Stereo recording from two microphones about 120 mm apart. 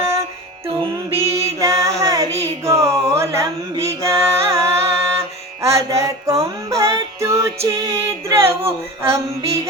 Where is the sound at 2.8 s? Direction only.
25° right (ahead or behind).